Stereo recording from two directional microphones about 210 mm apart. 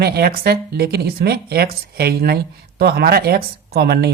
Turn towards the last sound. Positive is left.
turn(degrees=-50)  # may be behind; listen again after turning